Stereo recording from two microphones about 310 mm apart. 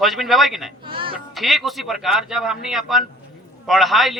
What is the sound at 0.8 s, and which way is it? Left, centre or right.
Speech, centre.